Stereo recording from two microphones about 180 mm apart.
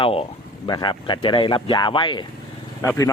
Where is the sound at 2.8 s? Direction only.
15° left (ahead or behind).